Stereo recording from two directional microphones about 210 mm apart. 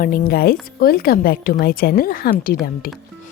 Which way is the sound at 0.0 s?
45° left (ahead or behind).